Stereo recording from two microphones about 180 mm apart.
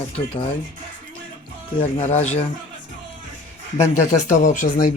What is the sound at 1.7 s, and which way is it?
Speech, 40° left (ahead or behind).